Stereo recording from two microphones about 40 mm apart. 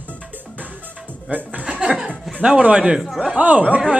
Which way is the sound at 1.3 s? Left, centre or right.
Right.